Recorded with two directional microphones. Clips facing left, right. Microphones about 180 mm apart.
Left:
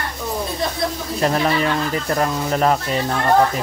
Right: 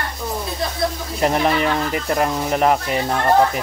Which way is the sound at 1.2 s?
15° right (ahead or behind).